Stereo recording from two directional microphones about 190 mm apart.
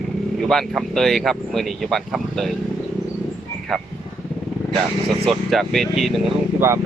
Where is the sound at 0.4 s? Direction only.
Centre (ahead or behind).